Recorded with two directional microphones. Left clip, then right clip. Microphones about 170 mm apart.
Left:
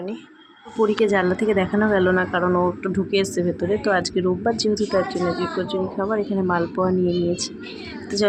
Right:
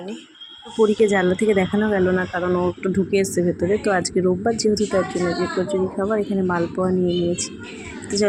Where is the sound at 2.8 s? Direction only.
15° right (ahead or behind).